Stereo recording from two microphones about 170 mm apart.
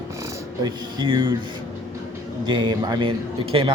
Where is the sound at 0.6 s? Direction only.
25° right (ahead or behind).